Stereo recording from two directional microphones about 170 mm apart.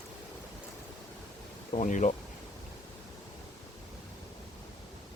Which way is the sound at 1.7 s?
45° left (ahead or behind).